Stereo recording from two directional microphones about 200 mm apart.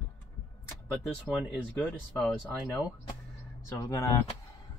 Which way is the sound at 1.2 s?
Centre (ahead or behind).